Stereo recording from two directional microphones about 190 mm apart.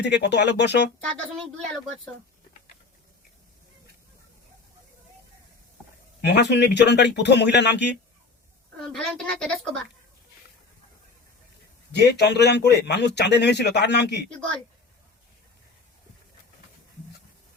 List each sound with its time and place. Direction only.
0.0 s a man's voice: 65° left (ahead or behind)
6.2 s a man's voice: 65° left (ahead or behind)
8.9 s speech: 5° left (ahead or behind)
11.9 s a man's voice: 60° left (ahead or behind)